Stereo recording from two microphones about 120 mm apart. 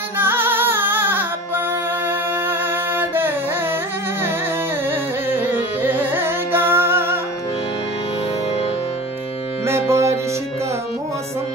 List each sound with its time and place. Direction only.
0.2 s music: 15° right (ahead or behind)
5.3 s carnatic music: 15° right (ahead or behind)
9.7 s music: 20° right (ahead or behind)